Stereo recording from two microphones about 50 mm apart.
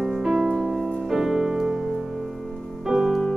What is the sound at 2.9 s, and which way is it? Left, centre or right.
Music, centre.